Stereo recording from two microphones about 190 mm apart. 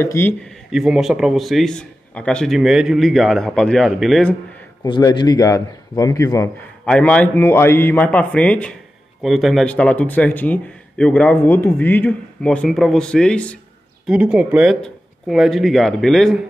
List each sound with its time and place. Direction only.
0.0 s speech: 10° left (ahead or behind)
4.8 s a man's voice: 25° left (ahead or behind)
6.9 s a man's voice: 5° left (ahead or behind)
14.0 s speech: 5° right (ahead or behind)